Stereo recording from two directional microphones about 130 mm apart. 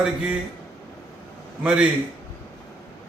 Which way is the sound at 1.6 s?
10° right (ahead or behind).